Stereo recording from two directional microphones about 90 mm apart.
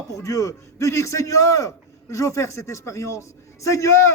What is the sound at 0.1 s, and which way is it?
A man's voice, 35° left (ahead or behind).